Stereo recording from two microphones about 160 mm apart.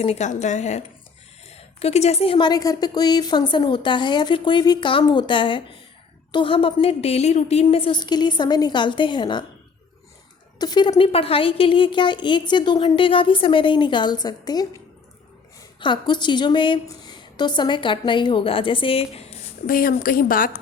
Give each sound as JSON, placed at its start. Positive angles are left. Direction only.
{"t": 0.0, "sound": "a woman's voice", "side_deg": 45}
{"t": 10.6, "sound": "a woman's voice", "side_deg": 25}
{"t": 15.8, "sound": "a woman's voice", "side_deg": 30}
{"t": 19.6, "sound": "speech", "side_deg": 65}